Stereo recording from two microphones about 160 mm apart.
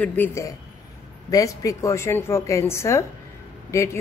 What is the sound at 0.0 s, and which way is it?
A man's voice, 10° left (ahead or behind).